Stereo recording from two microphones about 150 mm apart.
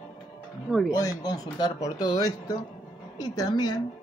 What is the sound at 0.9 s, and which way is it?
Speech, 25° left (ahead or behind).